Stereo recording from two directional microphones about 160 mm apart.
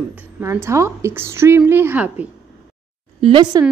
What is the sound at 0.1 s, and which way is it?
A woman's voice, 15° right (ahead or behind).